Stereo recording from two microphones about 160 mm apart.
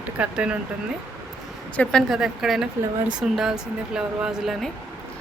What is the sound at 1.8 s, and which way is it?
Speech, 5° left (ahead or behind).